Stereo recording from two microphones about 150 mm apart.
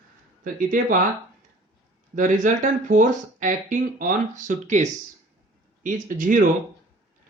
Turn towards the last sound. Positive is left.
turn(degrees=-60)  # may be behind; listen again after turning